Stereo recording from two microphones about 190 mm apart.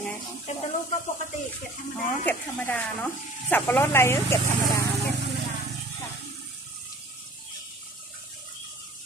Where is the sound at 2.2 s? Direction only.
10° left (ahead or behind).